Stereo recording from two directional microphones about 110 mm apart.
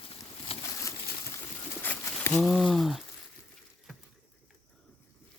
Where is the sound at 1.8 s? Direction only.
15° left (ahead or behind).